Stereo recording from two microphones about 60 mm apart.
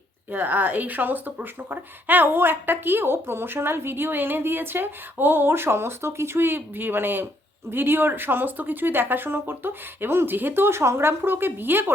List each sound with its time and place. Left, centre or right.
0.3 s speech: right